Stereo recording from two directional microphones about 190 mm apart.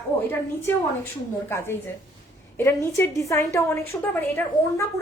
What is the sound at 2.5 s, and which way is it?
A woman's voice, 10° left (ahead or behind).